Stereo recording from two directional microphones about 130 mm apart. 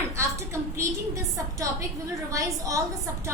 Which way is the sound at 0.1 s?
20° right (ahead or behind).